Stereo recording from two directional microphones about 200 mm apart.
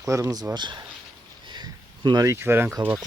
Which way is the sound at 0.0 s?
15° right (ahead or behind).